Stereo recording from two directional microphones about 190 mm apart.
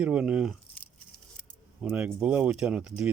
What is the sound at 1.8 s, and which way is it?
Speech, 10° right (ahead or behind).